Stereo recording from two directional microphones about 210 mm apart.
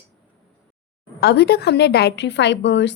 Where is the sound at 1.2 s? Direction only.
50° left (ahead or behind).